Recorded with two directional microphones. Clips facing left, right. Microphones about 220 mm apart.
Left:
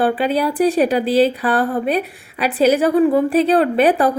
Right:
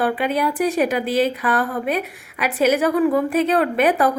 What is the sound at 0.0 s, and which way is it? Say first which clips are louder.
Speech: left 3 dB; 30° left (ahead or behind).